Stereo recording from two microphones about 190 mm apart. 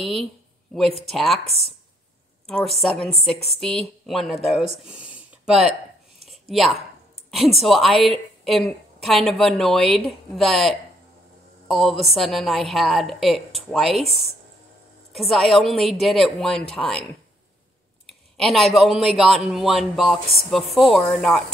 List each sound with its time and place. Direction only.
0.0 s a woman's voice: centre (ahead or behind)
2.4 s a woman's voice: centre (ahead or behind)
4.8 s a sound: 5° right (ahead or behind)
7.2 s a woman's voice: centre (ahead or behind)
15.1 s a woman's voice: centre (ahead or behind)
18.0 s a woman's voice: centre (ahead or behind)